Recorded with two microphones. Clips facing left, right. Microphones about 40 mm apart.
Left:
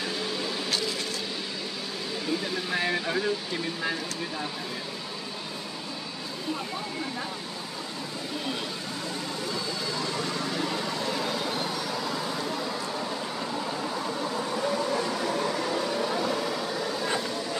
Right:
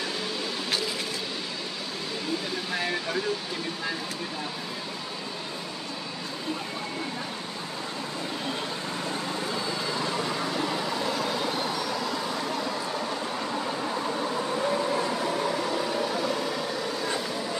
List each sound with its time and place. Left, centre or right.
10.0 s vehicle: centre
14.6 s vehicle: centre
15.4 s vehicle: centre